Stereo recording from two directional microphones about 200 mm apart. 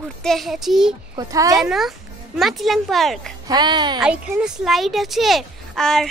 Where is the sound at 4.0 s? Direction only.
5° right (ahead or behind).